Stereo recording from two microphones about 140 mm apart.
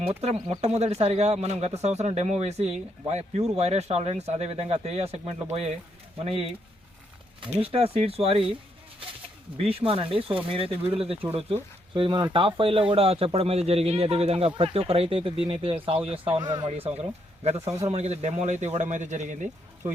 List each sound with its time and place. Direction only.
0.1 s speech: 50° right (ahead or behind)
9.6 s speech: 45° right (ahead or behind)
16.4 s speech: 30° right (ahead or behind)
17.4 s speech: 50° right (ahead or behind)